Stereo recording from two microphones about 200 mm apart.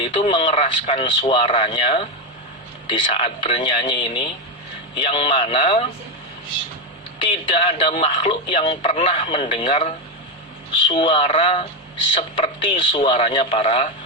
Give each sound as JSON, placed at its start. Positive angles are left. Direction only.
{"t": 0.0, "sound": "speech", "side_deg": 25}
{"t": 7.3, "sound": "speech", "side_deg": 30}